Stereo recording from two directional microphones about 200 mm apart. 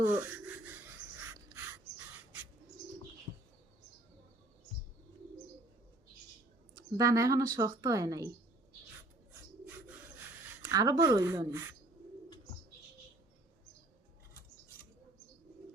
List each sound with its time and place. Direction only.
0.0 s a sound: 10° right (ahead or behind)
6.7 s a woman's voice: 15° right (ahead or behind)
10.7 s a woman's voice: 20° right (ahead or behind)